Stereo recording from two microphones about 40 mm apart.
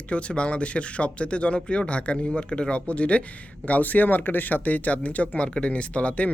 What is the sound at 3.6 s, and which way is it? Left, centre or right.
Speech, left.